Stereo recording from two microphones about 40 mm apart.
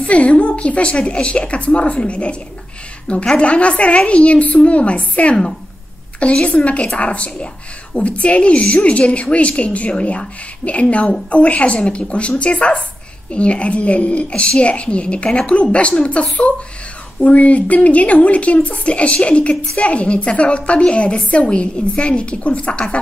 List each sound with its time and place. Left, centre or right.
0.0 s a woman's voice: left
6.4 s a woman's voice: left